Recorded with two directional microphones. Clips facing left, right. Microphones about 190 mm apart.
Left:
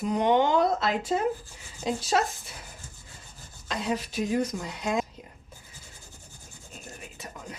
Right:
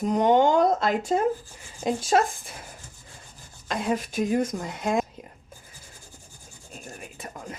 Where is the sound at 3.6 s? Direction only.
55° right (ahead or behind).